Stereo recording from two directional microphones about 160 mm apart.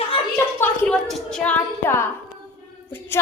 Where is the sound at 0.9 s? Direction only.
Centre (ahead or behind).